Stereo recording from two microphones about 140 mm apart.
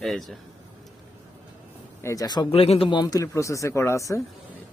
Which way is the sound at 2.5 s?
45° left (ahead or behind).